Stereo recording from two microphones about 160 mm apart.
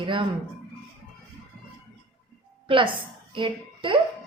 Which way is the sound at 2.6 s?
30° right (ahead or behind).